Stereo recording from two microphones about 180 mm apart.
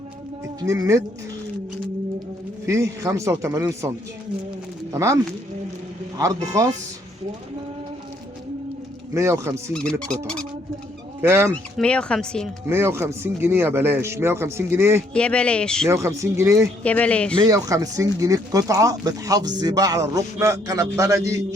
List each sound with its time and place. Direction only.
0.4 s speech: 20° right (ahead or behind)
2.6 s speech: 15° right (ahead or behind)
9.1 s speech: 15° right (ahead or behind)
11.2 s speech: 15° right (ahead or behind)
11.8 s speech: 5° left (ahead or behind)
12.6 s speech: 15° right (ahead or behind)
15.1 s speech: 5° left (ahead or behind)
15.9 s speech: 15° right (ahead or behind)
16.8 s speech: 5° left (ahead or behind)
17.3 s speech: 25° right (ahead or behind)